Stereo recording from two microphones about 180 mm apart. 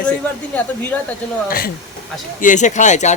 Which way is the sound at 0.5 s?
10° left (ahead or behind).